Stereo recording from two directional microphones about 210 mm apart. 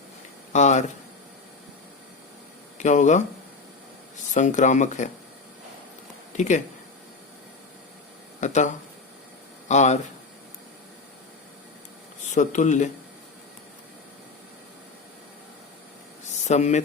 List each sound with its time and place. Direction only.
0.5 s speech: 35° left (ahead or behind)
2.7 s speech: 35° left (ahead or behind)
4.4 s speech: 35° left (ahead or behind)
6.3 s speech: 35° left (ahead or behind)
8.4 s speech: 35° left (ahead or behind)
12.3 s speech: 35° left (ahead or behind)
16.5 s speech: 35° left (ahead or behind)